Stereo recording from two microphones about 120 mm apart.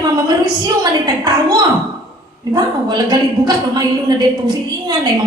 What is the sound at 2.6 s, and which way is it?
A woman's voice, 35° right (ahead or behind).